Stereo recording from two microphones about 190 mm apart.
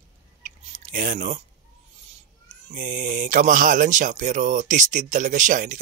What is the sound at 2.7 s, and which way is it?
Speech, 45° right (ahead or behind).